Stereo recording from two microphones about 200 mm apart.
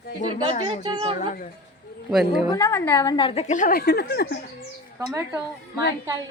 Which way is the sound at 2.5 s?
15° left (ahead or behind).